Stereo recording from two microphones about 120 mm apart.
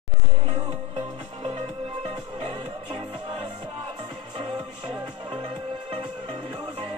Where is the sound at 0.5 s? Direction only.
55° right (ahead or behind).